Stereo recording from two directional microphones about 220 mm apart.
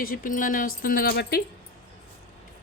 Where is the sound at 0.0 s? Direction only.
40° left (ahead or behind).